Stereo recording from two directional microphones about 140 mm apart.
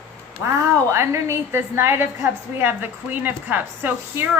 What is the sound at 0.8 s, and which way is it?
A woman's voice, 20° right (ahead or behind).